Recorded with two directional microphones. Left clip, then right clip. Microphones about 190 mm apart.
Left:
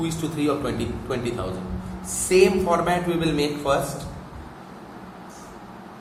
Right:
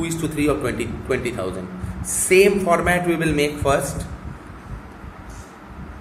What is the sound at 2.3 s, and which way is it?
A man's voice, 50° right (ahead or behind).